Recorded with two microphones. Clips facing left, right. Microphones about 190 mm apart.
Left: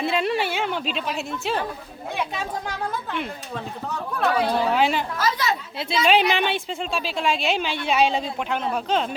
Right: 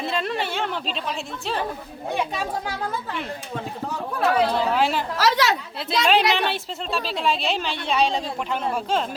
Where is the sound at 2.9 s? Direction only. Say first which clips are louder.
Left 1 dB; centre (ahead or behind).